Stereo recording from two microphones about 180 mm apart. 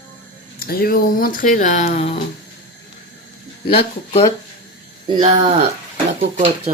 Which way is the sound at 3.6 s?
30° left (ahead or behind).